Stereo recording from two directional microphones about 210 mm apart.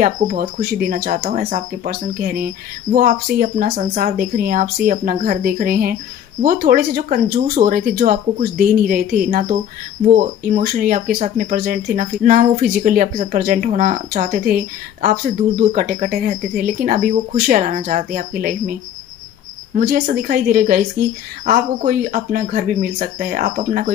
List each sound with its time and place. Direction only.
0.0 s speech: 40° right (ahead or behind)